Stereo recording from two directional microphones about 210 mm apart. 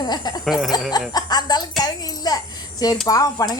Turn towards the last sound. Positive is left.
turn(degrees=15)  # may be behind; listen again after turning